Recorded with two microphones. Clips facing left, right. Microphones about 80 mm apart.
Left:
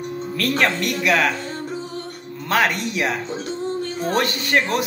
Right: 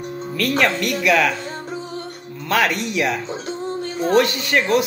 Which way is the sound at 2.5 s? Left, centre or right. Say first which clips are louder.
Right 1 dB; left.